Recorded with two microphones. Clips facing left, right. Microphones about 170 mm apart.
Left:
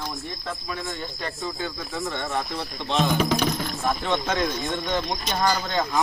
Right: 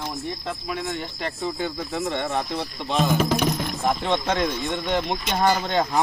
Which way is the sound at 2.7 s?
10° right (ahead or behind).